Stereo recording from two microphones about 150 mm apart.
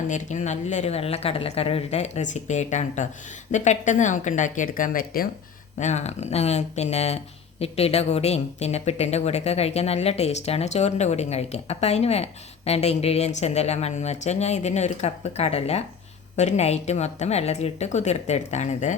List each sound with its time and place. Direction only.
0.1 s speech: 55° left (ahead or behind); by 5.3 s 75° left (ahead or behind)
5.8 s speech: 50° left (ahead or behind)